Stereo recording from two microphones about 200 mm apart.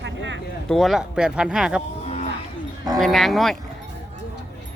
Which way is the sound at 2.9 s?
Centre (ahead or behind).